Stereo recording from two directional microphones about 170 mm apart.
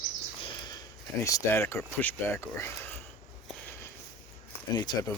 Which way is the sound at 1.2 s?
15° left (ahead or behind).